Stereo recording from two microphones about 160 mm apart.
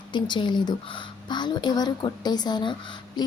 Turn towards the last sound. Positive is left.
turn(degrees=30)  # may be behind; listen again after turning